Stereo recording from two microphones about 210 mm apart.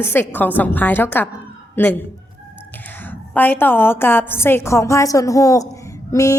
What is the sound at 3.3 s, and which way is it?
A woman's voice, 10° left (ahead or behind).